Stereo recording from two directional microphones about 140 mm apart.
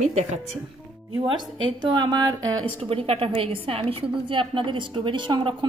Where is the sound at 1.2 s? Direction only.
35° right (ahead or behind).